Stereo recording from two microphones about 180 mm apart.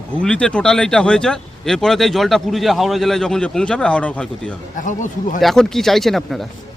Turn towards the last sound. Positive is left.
turn(degrees=0)  # may be behind; listen again after turning